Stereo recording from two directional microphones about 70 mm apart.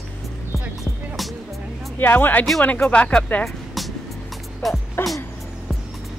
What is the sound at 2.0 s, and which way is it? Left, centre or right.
Speech, left.